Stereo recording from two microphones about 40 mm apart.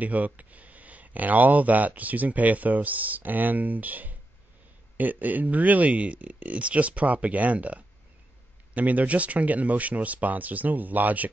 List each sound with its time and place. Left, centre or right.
0.0 s speech: right